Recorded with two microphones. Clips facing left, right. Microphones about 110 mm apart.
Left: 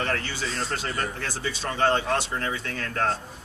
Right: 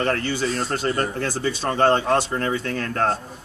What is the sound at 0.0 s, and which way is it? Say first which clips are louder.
A man's voice: right 6 dB; 50° right (ahead or behind).